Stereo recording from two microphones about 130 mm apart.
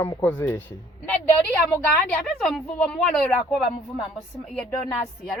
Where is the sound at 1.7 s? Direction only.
10° left (ahead or behind).